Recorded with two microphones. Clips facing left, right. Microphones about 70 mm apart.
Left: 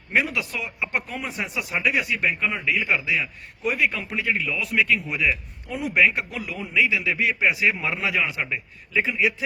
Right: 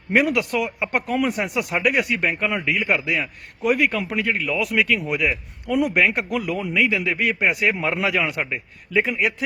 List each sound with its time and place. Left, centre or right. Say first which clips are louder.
0.3 s a man's voice: right 8 dB; right